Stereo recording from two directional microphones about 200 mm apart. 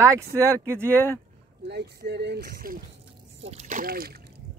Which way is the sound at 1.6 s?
55° right (ahead or behind).